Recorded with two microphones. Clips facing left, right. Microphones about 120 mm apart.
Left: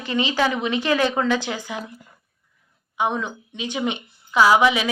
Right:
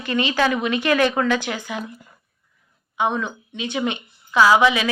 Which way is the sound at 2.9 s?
15° left (ahead or behind).